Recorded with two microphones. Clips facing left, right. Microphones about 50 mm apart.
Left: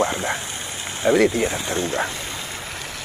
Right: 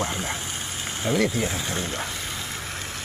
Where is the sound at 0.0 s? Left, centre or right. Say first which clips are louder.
Left 6 dB; left.